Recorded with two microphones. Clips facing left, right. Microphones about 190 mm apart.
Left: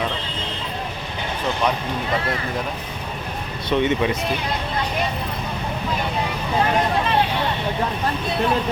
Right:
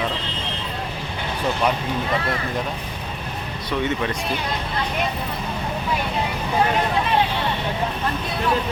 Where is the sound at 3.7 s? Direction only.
20° left (ahead or behind).